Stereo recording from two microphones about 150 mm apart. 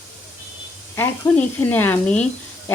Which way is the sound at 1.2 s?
15° left (ahead or behind).